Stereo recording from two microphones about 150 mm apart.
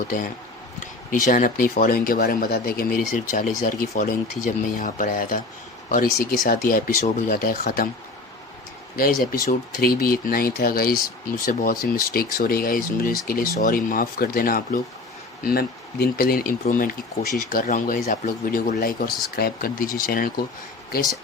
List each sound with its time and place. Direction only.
1.1 s speech: 60° left (ahead or behind); by 3.0 s 85° left
3.1 s speech: 60° left (ahead or behind)
5.9 s speech: 75° left (ahead or behind)
9.0 s speech: 70° left (ahead or behind)
15.4 s speech: 90° left